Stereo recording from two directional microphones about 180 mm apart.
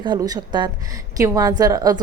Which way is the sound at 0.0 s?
25° right (ahead or behind).